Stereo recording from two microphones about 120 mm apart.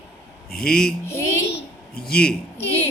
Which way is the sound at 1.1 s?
20° left (ahead or behind).